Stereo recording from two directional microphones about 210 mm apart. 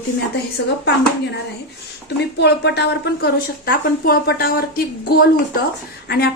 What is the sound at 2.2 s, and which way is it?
A woman's voice, 55° left (ahead or behind).